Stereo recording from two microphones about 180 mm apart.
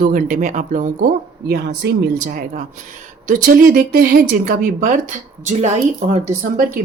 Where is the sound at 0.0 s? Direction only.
50° right (ahead or behind).